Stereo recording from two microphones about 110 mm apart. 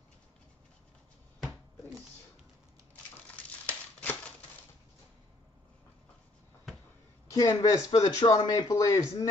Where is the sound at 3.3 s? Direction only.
15° left (ahead or behind).